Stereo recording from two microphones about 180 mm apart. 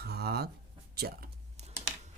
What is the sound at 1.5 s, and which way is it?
Typing, 35° right (ahead or behind).